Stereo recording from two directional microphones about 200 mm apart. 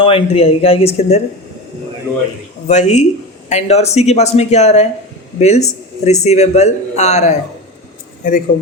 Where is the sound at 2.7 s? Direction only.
35° left (ahead or behind).